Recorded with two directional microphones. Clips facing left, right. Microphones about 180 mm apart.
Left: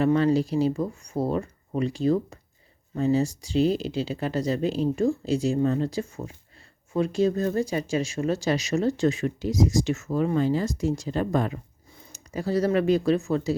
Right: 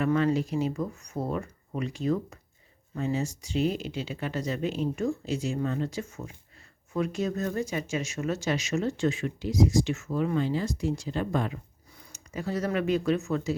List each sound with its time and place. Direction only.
0.0 s speech: 30° left (ahead or behind)